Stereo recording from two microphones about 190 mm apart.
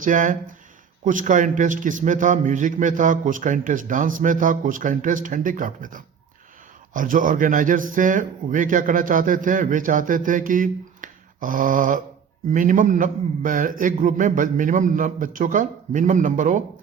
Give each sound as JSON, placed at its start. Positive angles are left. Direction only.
{"t": 0.0, "sound": "speech", "side_deg": -45}